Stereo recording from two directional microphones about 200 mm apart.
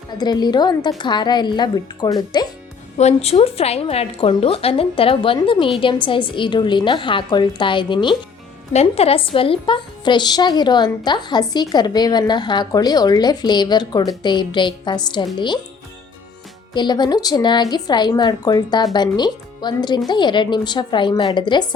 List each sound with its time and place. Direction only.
0.2 s a woman's voice: 20° left (ahead or behind)
3.0 s a woman's voice: 30° left (ahead or behind)
16.7 s a woman's voice: 20° left (ahead or behind)